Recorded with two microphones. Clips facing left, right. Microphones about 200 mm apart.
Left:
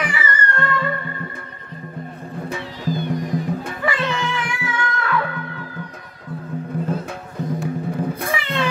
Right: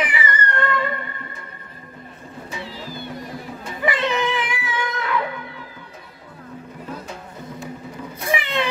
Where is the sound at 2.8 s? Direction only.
15° left (ahead or behind).